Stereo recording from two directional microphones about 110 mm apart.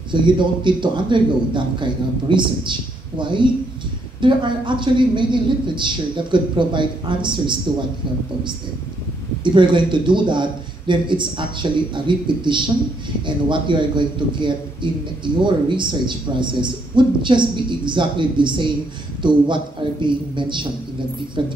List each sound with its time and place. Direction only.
0.1 s a man's voice: 45° right (ahead or behind)
9.4 s a man's voice: 45° right (ahead or behind)